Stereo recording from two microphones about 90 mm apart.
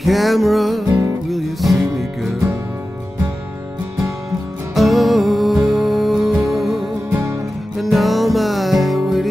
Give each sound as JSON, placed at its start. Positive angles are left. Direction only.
{"t": 0.0, "sound": "music", "side_deg": 0}
{"t": 4.7, "sound": "music", "side_deg": 0}
{"t": 7.1, "sound": "music", "side_deg": -30}
{"t": 7.8, "sound": "music", "side_deg": 0}